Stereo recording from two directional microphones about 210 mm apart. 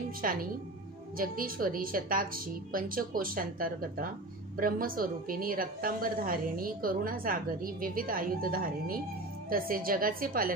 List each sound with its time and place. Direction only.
0.2 s a woman's voice: 40° right (ahead or behind)